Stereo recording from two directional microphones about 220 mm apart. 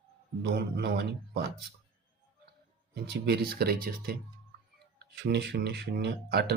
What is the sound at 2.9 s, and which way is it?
Speech, 50° right (ahead or behind).